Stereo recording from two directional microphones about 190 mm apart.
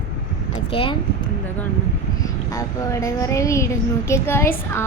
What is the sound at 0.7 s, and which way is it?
Speech, 30° left (ahead or behind).